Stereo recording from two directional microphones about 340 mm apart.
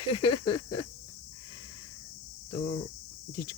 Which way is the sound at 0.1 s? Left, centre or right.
Centre.